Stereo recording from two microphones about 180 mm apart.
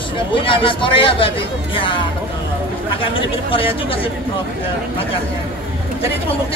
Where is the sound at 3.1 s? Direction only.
30° left (ahead or behind).